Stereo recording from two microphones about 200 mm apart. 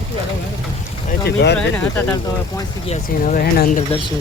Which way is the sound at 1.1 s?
55° left (ahead or behind).